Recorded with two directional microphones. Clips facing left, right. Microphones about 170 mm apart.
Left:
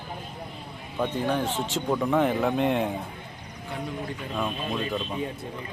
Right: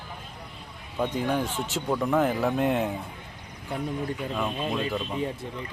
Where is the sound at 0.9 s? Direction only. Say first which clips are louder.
Even; 10° right (ahead or behind).